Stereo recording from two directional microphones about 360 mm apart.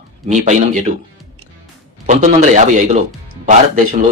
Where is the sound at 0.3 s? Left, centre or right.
Centre.